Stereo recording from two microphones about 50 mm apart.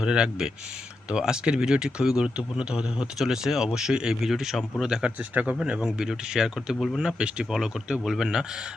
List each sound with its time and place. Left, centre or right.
0.0 s speech: centre
3.2 s speech: centre
5.3 s speech: right
5.8 s speech: centre
6.7 s speech: centre
7.0 s speech: centre